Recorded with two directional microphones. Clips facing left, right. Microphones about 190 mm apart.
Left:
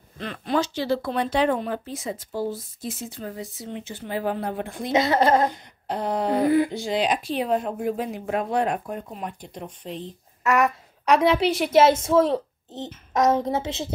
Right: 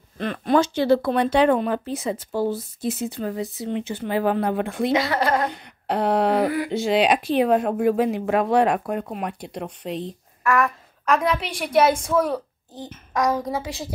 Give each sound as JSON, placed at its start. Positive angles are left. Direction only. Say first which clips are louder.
{"t": 0.2, "sound": "speech", "louder": "right 5 dB", "side_deg": -55}
{"t": 4.9, "sound": "a woman's voice", "louder": "left 5 dB", "side_deg": 20}
{"t": 5.5, "sound": "a sound", "louder": "right 4 dB", "side_deg": -70}
{"t": 6.7, "sound": "speech", "louder": "right 5 dB", "side_deg": -70}
{"t": 11.2, "sound": "a woman's voice", "louder": "left 5 dB", "side_deg": 30}